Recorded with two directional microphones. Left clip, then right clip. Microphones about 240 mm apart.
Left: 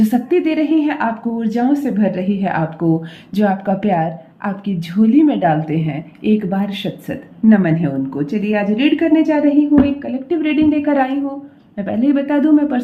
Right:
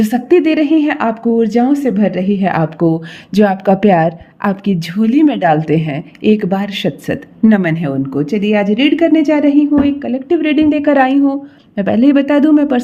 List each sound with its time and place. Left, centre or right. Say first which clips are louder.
0.0 s speech: right 4 dB; right